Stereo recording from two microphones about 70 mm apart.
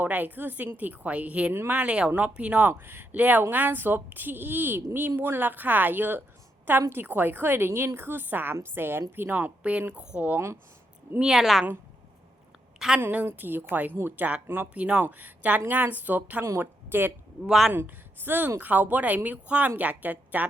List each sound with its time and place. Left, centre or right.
0.0 s a woman's voice: right
9.9 s speech: centre
10.2 s speech: right
11.2 s a woman's voice: centre
13.0 s a woman's voice: right
14.7 s speech: centre
16.4 s a woman's voice: right
17.4 s a woman's voice: centre
17.7 s a woman's voice: right